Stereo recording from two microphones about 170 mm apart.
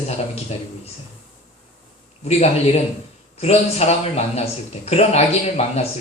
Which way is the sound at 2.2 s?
40° left (ahead or behind).